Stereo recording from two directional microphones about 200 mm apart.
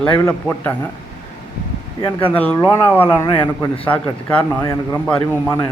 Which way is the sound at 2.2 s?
10° left (ahead or behind).